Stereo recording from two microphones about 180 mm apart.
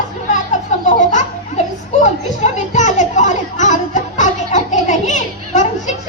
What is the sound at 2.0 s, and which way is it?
Children playing, 40° left (ahead or behind).